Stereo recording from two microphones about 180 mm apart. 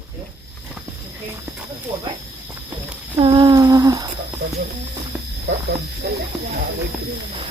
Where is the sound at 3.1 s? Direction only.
25° right (ahead or behind).